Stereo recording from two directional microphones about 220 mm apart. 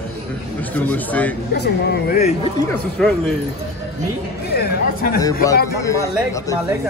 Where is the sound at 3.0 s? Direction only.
Centre (ahead or behind).